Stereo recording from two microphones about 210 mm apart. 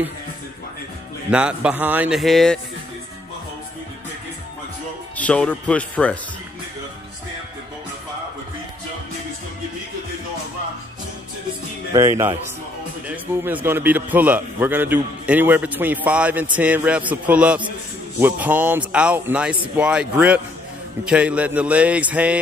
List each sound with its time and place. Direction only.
1.3 s a man's voice: 5° right (ahead or behind)
5.1 s a man's voice: 5° left (ahead or behind)
11.9 s a man's voice: 10° right (ahead or behind)